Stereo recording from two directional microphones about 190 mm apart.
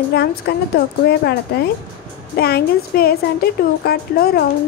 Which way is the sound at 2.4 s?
55° left (ahead or behind).